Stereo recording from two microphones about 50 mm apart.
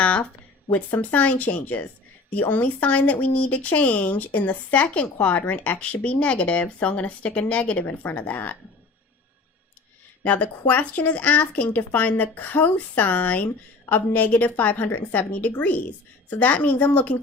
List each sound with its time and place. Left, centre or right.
0.0 s a sound: left
0.7 s speech: left
10.2 s speech: left